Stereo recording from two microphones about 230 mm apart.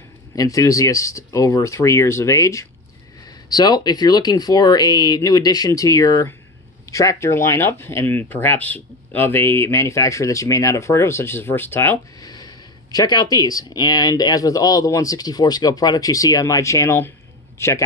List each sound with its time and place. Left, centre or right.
0.4 s a man's voice: centre